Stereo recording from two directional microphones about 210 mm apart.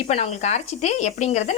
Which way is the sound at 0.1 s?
30° left (ahead or behind).